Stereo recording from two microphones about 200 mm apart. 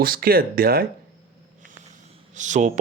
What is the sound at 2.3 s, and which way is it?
Speech, 40° right (ahead or behind).